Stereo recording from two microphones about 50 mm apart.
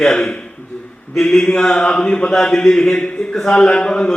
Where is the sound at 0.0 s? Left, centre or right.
Centre.